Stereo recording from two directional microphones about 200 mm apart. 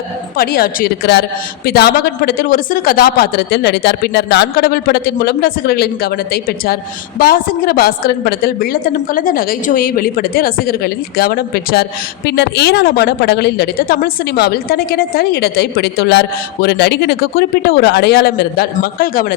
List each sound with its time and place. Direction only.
0.3 s a woman's voice: 50° left (ahead or behind)